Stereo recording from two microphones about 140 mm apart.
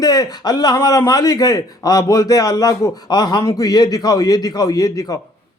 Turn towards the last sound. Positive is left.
turn(degrees=25)  # may be behind; listen again after turning